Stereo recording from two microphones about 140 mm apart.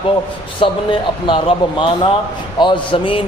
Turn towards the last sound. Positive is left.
turn(degrees=40)  # may be behind; listen again after turning